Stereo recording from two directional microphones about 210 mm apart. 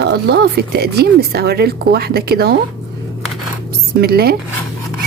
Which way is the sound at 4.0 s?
50° right (ahead or behind).